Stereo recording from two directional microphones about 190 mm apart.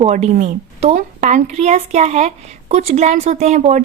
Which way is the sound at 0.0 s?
35° right (ahead or behind).